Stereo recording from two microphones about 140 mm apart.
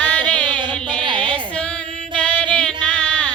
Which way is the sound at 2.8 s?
10° left (ahead or behind).